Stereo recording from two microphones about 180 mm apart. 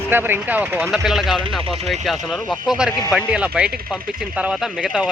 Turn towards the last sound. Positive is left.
turn(degrees=-5)  # may be behind; listen again after turning